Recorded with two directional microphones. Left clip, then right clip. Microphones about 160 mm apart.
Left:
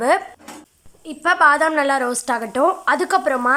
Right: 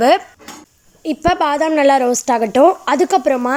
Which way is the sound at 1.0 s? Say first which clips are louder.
Left 1 dB; 25° right (ahead or behind).